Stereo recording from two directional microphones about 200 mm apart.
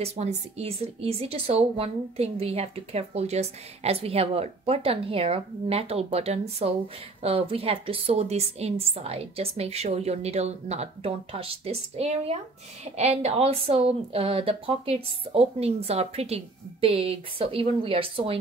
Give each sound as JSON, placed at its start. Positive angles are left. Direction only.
{"t": 0.0, "sound": "speech", "side_deg": -30}